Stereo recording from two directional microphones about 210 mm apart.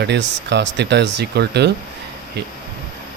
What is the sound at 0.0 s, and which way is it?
Speech, 55° right (ahead or behind).